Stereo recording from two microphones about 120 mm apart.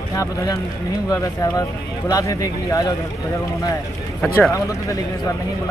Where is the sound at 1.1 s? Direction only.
30° left (ahead or behind).